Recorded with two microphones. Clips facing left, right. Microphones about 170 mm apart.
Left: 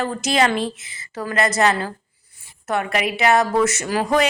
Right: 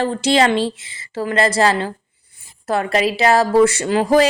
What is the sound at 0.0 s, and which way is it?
A woman's voice, 30° right (ahead or behind).